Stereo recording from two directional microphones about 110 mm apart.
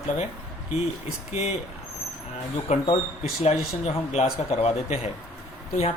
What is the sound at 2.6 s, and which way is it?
Speech, 75° left (ahead or behind).